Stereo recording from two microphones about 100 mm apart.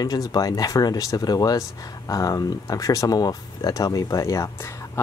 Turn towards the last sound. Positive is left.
turn(degrees=30)  # may be behind; listen again after turning